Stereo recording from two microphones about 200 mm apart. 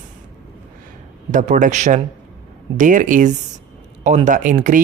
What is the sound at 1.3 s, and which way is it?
Speech, 40° right (ahead or behind).